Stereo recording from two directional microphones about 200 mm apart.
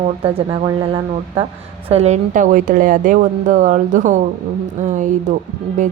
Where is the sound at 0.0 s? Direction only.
30° right (ahead or behind).